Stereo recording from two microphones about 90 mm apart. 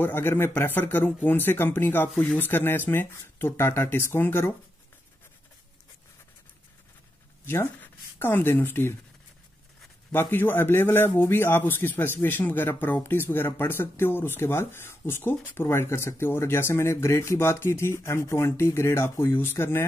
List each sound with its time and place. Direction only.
0.0 s speech: 25° left (ahead or behind)
7.4 s speech: 25° left (ahead or behind)
10.1 s speech: 25° left (ahead or behind)